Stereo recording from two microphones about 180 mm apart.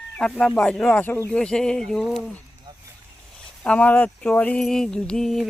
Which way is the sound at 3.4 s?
5° left (ahead or behind).